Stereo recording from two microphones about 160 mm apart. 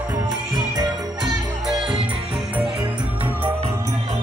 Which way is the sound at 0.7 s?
25° right (ahead or behind).